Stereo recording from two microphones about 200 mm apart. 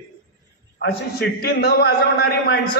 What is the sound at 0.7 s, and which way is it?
A man's voice, 50° left (ahead or behind).